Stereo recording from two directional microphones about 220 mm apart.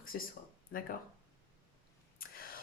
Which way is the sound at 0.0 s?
40° left (ahead or behind).